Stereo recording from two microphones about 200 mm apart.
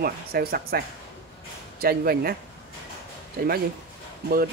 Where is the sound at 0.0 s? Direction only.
50° right (ahead or behind).